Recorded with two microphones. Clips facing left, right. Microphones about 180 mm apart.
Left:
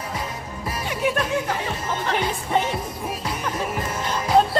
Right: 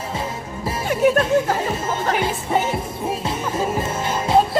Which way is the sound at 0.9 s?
45° right (ahead or behind).